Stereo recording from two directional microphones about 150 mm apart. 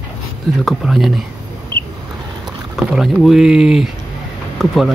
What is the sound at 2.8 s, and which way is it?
Speech, centre (ahead or behind).